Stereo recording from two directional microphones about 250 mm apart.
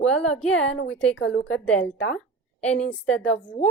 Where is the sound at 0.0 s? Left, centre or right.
Centre.